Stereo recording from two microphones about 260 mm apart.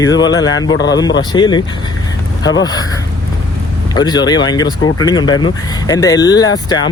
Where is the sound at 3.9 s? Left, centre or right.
Centre.